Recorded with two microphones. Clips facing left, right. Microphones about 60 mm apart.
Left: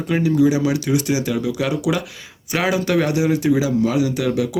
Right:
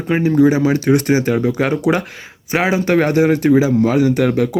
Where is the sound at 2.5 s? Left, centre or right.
Right.